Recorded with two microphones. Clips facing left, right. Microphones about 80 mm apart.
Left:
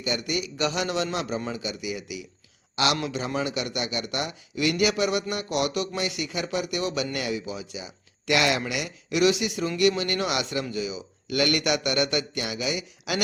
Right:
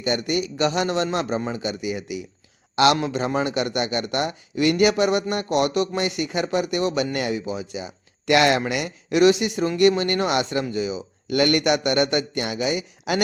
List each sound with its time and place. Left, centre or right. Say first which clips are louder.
0.0 s a man's voice: right 5 dB; right